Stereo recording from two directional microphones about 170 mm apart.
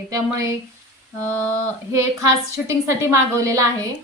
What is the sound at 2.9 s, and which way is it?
A woman's voice, 15° right (ahead or behind).